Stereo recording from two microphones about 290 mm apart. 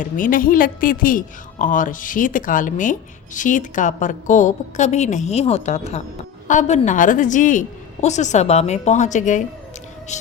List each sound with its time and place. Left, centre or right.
0.0 s a woman's voice: left